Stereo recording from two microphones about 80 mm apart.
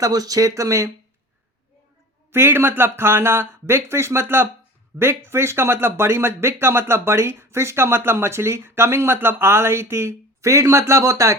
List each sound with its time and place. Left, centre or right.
0.0 s speech: right
2.3 s speech: right